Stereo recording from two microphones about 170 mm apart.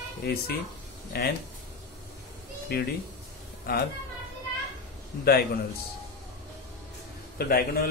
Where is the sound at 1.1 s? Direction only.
65° left (ahead or behind).